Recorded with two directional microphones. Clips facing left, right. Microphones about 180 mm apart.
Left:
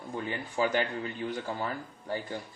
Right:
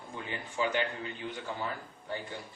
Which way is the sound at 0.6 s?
40° left (ahead or behind).